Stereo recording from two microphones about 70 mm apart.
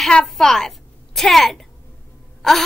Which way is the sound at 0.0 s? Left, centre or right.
Centre.